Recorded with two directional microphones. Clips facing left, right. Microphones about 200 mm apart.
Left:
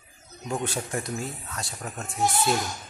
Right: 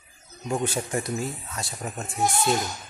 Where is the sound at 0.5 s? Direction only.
Centre (ahead or behind).